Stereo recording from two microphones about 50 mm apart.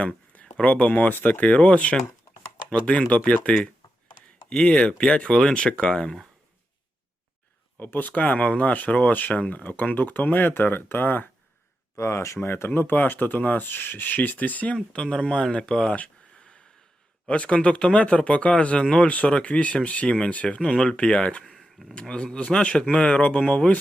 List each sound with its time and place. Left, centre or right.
0.0 s a sound: left
0.6 s speech: left
7.8 s speech: left
11.9 s speech: left
12.5 s speech: left
14.9 s speech: left
16.0 s a sound: centre
17.2 s speech: left
21.4 s a sound: centre
22.1 s speech: left